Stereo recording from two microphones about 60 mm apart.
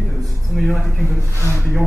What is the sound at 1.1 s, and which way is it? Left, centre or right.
Speech, left.